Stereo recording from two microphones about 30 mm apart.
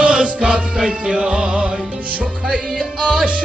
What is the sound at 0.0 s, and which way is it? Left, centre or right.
Music, right.